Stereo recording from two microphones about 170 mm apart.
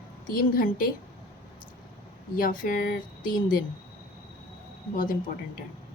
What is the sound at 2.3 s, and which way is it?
Speech, 55° left (ahead or behind).